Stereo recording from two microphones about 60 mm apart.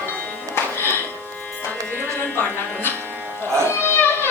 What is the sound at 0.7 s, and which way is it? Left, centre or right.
Music, left.